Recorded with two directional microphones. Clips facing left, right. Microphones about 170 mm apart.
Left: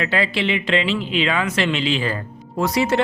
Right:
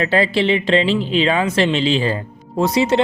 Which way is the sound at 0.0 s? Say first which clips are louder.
Right 5 dB; 35° right (ahead or behind).